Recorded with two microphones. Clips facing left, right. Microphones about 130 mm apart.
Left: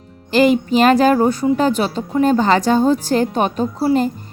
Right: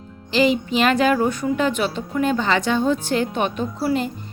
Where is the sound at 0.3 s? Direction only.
50° left (ahead or behind).